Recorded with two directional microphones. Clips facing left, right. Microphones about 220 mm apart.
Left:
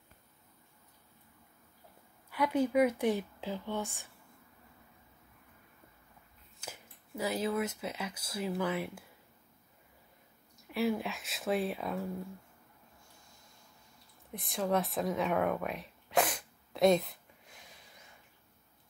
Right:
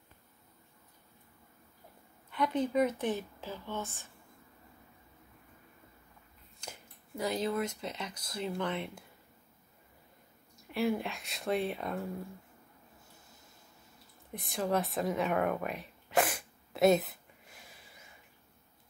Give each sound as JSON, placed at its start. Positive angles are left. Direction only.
{"t": 2.3, "sound": "speech", "side_deg": 10}
{"t": 6.6, "sound": "speech", "side_deg": 5}
{"t": 10.7, "sound": "speech", "side_deg": 0}
{"t": 14.3, "sound": "a sound", "side_deg": 0}